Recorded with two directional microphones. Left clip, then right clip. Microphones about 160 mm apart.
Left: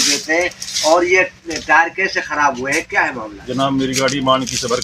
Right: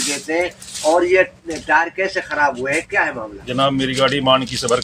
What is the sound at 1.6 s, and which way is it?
Speech, 55° left (ahead or behind).